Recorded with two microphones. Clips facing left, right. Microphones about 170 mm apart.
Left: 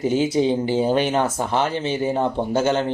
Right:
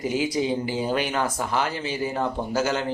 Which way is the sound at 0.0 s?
30° left (ahead or behind).